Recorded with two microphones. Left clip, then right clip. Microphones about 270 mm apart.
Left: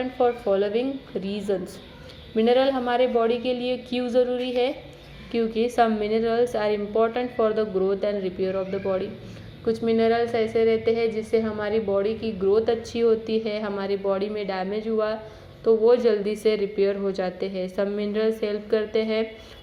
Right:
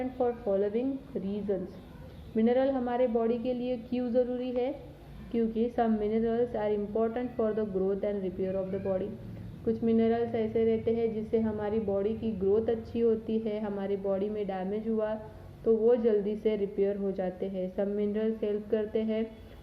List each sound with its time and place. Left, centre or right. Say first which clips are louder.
0.2 s a woman's voice: left 7 dB; centre
3.3 s a woman's voice: left 7 dB; left
3.7 s a woman's voice: left 6 dB; centre